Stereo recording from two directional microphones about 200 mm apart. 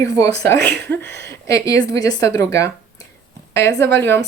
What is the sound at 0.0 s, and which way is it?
Speech, 15° left (ahead or behind).